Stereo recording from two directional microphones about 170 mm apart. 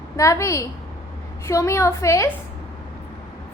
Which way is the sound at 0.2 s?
20° left (ahead or behind).